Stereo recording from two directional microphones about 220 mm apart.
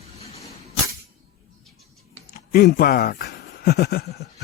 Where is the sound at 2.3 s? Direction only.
40° left (ahead or behind).